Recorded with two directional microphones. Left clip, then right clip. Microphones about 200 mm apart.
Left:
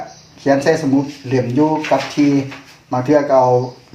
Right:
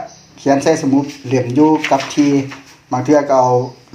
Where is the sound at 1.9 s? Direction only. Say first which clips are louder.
Right 1 dB; 20° right (ahead or behind).